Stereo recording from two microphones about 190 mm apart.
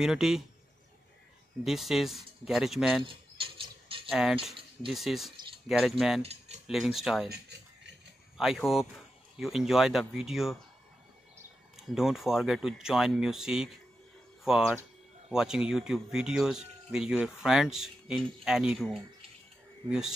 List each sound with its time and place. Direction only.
0.0 s speech: centre (ahead or behind)
1.6 s speech: centre (ahead or behind)
3.0 s bird: 25° right (ahead or behind)
4.1 s speech: 5° right (ahead or behind)
7.2 s a sound: 60° right (ahead or behind)
8.4 s speech: centre (ahead or behind)
11.8 s speech: centre (ahead or behind)